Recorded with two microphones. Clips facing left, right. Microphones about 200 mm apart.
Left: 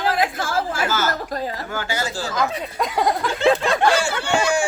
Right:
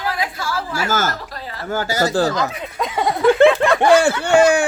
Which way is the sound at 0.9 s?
45° right (ahead or behind).